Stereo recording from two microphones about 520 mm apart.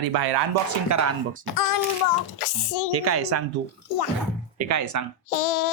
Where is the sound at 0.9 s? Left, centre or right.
Right.